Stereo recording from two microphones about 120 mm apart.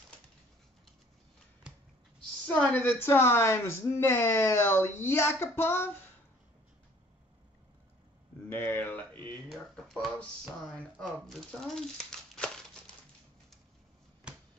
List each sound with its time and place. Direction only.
2.4 s speech: 10° left (ahead or behind)
8.5 s a sound: 20° left (ahead or behind)
9.5 s speech: centre (ahead or behind)